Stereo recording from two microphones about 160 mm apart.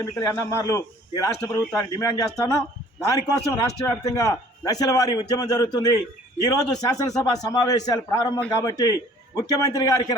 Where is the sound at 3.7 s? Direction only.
20° left (ahead or behind).